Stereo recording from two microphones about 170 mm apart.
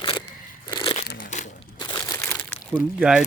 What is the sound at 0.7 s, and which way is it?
Crunch, 25° left (ahead or behind).